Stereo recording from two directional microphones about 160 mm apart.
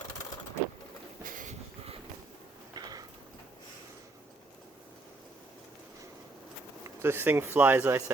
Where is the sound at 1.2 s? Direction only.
55° right (ahead or behind).